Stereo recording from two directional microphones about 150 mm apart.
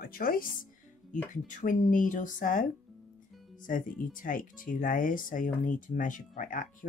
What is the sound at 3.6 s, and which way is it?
Speech, 65° left (ahead or behind).